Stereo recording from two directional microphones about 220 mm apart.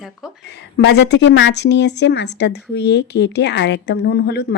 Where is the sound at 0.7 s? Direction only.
50° left (ahead or behind).